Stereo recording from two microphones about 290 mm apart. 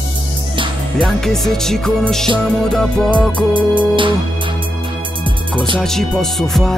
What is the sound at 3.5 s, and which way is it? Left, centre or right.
Music, centre.